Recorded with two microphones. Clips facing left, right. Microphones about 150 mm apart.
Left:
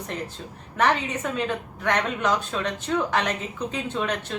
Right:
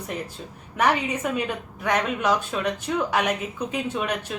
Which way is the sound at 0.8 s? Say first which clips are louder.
Right 1 dB; 10° right (ahead or behind).